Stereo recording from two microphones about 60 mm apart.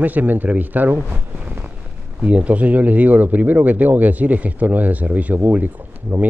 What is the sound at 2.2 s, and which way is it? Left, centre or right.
Speech, right.